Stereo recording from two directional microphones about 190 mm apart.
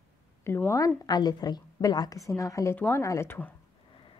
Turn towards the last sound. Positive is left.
turn(degrees=10)  # may be behind; listen again after turning